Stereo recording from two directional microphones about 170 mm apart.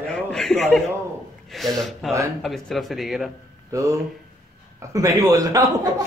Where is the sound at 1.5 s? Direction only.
Centre (ahead or behind).